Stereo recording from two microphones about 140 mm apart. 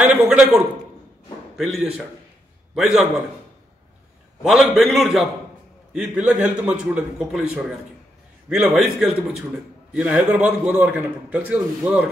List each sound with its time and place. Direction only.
0.0 s a sound: 5° right (ahead or behind)
1.6 s a man's voice: 5° right (ahead or behind)
4.4 s a man's voice: centre (ahead or behind)